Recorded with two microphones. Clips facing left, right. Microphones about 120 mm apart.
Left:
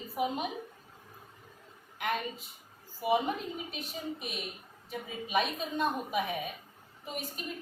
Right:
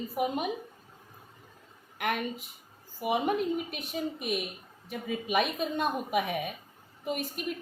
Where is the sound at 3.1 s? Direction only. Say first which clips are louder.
Right 2 dB; 65° right (ahead or behind).